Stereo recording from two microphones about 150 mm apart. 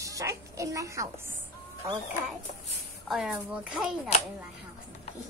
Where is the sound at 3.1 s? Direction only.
5° right (ahead or behind).